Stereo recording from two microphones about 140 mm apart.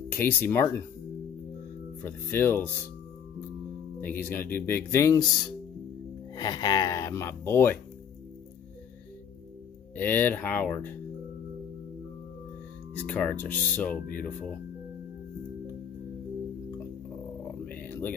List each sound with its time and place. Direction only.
0.1 s speech: 15° left (ahead or behind)
2.0 s speech: 15° left (ahead or behind)
4.0 s speech: 15° left (ahead or behind)
9.9 s speech: 15° left (ahead or behind)
13.0 s speech: 10° left (ahead or behind)
17.6 s purr: 15° left (ahead or behind)